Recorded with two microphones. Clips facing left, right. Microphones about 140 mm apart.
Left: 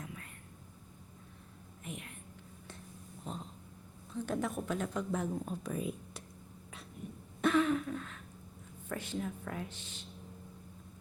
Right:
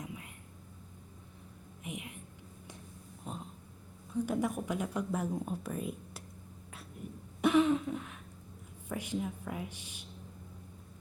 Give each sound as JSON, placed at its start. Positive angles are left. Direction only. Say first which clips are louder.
{"t": 0.0, "sound": "whispering", "louder": "right 3 dB", "side_deg": -15}
{"t": 1.8, "sound": "a sound", "louder": "right 3 dB", "side_deg": -15}
{"t": 3.3, "sound": "dog", "louder": "even", "side_deg": -5}
{"t": 4.1, "sound": "speech", "louder": "right 3 dB", "side_deg": -10}
{"t": 7.4, "sound": "throat clearing", "louder": "right 3 dB", "side_deg": -15}
{"t": 8.9, "sound": "speech", "louder": "right 2 dB", "side_deg": -10}